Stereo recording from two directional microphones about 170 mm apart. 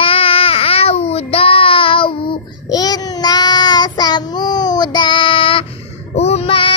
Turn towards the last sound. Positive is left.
turn(degrees=30)  # may be behind; listen again after turning